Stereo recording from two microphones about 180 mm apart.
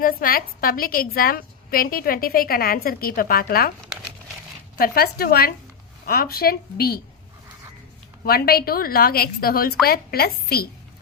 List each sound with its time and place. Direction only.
0.0 s a woman's voice: 50° left (ahead or behind)
4.8 s a woman's voice: 60° left (ahead or behind)
8.2 s a woman's voice: 60° left (ahead or behind)